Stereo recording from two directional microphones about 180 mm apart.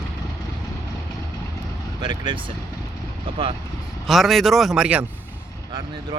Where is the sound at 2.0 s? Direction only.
25° right (ahead or behind).